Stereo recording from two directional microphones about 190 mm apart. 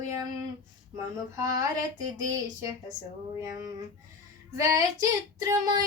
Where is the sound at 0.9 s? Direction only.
15° right (ahead or behind).